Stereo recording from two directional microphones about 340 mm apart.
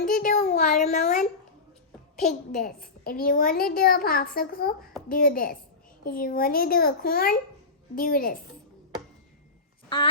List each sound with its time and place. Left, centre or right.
0.0 s a child's voice: left